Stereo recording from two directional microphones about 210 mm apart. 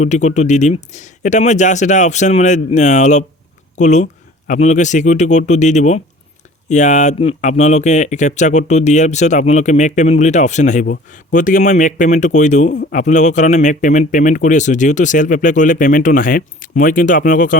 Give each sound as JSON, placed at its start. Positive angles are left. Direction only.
{"t": 0.0, "sound": "speech", "side_deg": 35}